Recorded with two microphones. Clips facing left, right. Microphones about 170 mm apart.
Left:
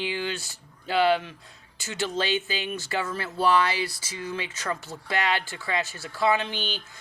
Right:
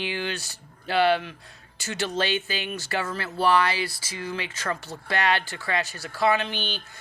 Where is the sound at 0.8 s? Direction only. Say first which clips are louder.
Right 1 dB; 20° left (ahead or behind).